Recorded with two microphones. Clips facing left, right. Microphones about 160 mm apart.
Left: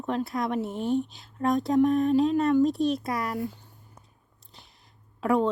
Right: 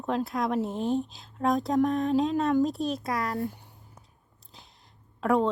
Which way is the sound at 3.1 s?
20° left (ahead or behind).